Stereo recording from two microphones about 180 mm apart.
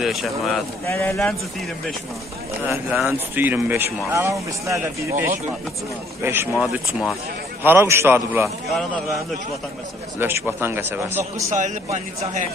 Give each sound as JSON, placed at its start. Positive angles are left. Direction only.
{"t": 0.0, "sound": "speech", "side_deg": 0}
{"t": 0.8, "sound": "speech", "side_deg": 15}
{"t": 2.6, "sound": "speech", "side_deg": -10}
{"t": 6.5, "sound": "speech", "side_deg": 0}
{"t": 7.6, "sound": "speech", "side_deg": -15}
{"t": 10.1, "sound": "speech", "side_deg": -15}
{"t": 11.5, "sound": "speech", "side_deg": -40}